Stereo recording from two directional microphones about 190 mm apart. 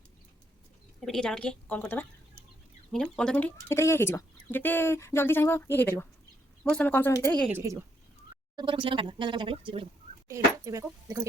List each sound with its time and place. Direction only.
1.0 s a woman's voice: centre (ahead or behind)
7.5 s speech: 15° right (ahead or behind)
10.2 s speech: 15° right (ahead or behind)